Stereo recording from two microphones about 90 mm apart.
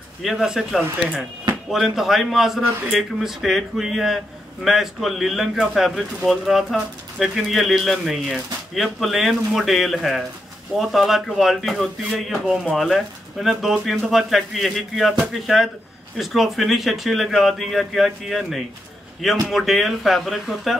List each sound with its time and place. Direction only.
0.2 s speech: centre (ahead or behind)